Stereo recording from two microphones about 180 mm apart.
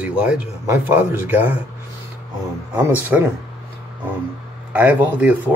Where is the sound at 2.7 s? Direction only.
10° right (ahead or behind).